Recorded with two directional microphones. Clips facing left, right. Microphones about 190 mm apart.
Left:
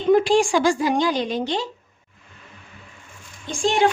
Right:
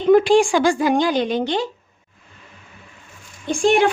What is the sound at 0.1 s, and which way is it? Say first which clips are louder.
Speech: right 3 dB; 60° right (ahead or behind).